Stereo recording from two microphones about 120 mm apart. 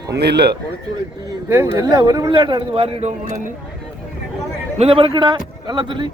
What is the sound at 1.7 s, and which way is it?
Speech, 30° right (ahead or behind).